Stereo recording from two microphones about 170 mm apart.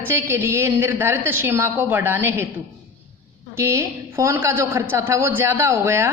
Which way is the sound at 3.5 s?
15° right (ahead or behind).